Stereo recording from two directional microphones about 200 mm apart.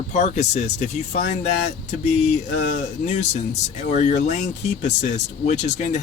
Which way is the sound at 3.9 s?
35° left (ahead or behind).